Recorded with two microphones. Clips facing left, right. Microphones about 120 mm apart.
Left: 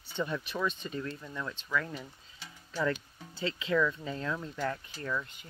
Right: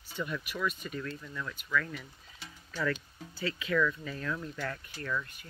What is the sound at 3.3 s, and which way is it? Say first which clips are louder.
Speech: left 1 dB; 25° left (ahead or behind).